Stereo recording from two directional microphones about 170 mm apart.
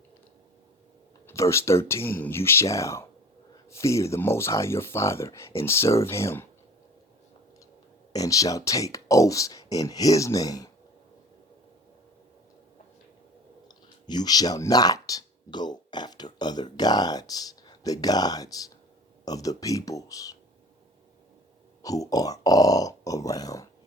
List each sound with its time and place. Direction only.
1.3 s speech: 15° left (ahead or behind)
8.1 s speech: 20° left (ahead or behind)
13.7 s speech: 25° left (ahead or behind)
21.8 s speech: 20° left (ahead or behind)